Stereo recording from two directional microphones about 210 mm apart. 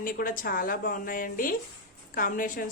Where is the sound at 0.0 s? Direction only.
40° left (ahead or behind).